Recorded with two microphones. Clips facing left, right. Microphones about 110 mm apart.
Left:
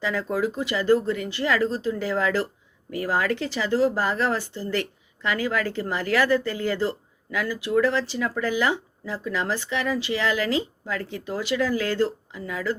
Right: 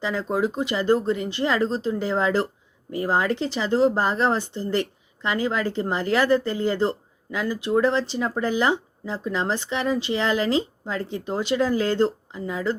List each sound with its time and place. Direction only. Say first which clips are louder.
0.0 s speech: right 1 dB; 20° right (ahead or behind)